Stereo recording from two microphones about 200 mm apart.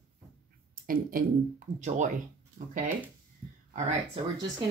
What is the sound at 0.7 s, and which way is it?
Speech, 45° right (ahead or behind).